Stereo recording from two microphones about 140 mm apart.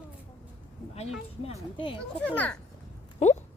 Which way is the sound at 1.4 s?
40° left (ahead or behind).